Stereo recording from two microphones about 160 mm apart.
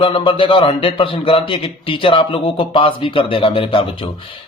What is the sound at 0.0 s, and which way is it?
A man's voice, 30° left (ahead or behind).